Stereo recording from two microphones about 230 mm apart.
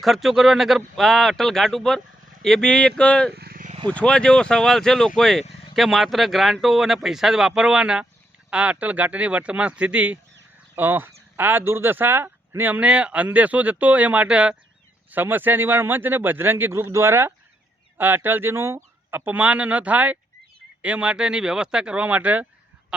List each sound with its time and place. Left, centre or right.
0.0 s speech: centre
3.3 s wild animals: right
3.8 s speech: centre